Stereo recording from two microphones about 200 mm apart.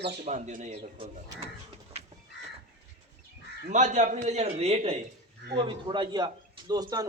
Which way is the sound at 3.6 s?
35° right (ahead or behind).